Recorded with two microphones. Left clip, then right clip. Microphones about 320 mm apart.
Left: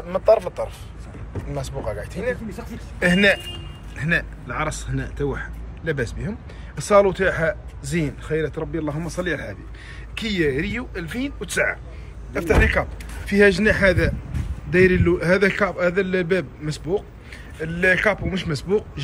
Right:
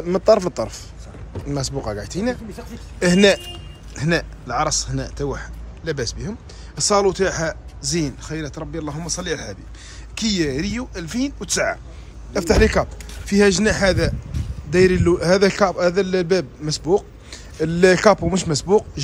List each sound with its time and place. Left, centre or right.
0.3 s speech: right
2.0 s speech: centre